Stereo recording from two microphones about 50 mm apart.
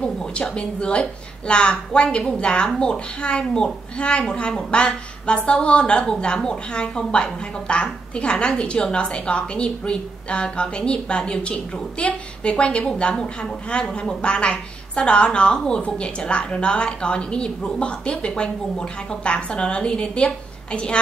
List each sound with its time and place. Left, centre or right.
0.0 s a woman's voice: left